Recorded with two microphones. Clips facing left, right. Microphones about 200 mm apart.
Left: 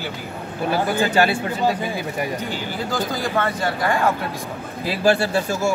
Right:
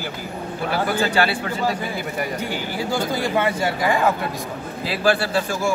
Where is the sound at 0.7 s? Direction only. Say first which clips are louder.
Left 2 dB; 20° left (ahead or behind).